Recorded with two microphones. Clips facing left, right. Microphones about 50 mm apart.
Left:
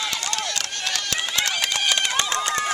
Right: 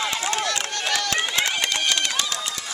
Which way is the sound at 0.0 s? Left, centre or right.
Centre.